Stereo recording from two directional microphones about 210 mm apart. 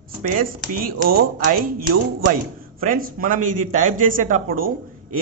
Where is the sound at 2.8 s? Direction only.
40° right (ahead or behind).